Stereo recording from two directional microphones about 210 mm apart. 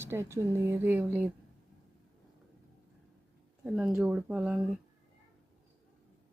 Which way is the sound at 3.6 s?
5° right (ahead or behind).